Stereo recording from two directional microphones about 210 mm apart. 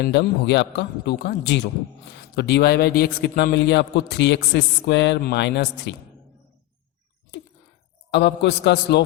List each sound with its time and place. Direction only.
0.0 s a man's voice: 55° left (ahead or behind)
8.1 s a man's voice: 55° left (ahead or behind)